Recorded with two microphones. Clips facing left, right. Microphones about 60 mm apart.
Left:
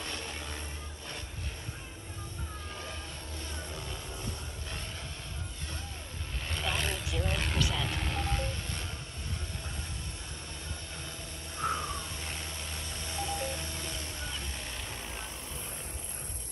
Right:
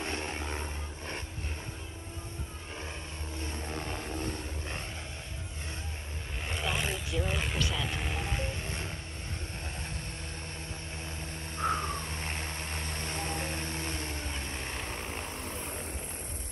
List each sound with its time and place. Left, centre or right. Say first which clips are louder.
0.0 s vehicle: right 4 dB; right
3.4 s vehicle: right 5 dB; right
6.4 s vehicle: right 1 dB; centre
7.1 s music: right 1 dB; centre; by 8.9 s right
11.5 s a sound: right 2 dB; right